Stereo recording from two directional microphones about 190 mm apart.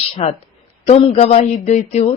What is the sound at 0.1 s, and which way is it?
Speech, 30° left (ahead or behind).